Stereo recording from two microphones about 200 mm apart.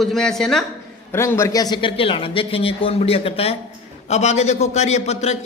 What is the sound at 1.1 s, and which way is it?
A man's voice, 15° left (ahead or behind).